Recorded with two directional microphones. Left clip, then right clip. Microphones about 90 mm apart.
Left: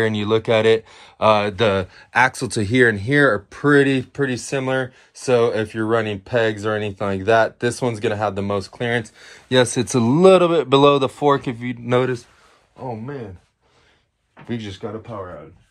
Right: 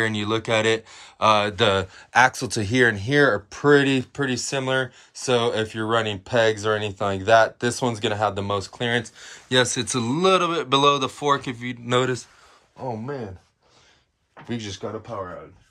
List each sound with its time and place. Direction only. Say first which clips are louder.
0.0 s speech: left 5 dB; 20° right (ahead or behind)
2.4 s speech: left 3 dB; 20° right (ahead or behind)
3.4 s speech: left 2 dB; 40° right (ahead or behind)
9.5 s speech: left 4 dB; 10° right (ahead or behind)
14.5 s speech: left 2 dB; 45° right (ahead or behind)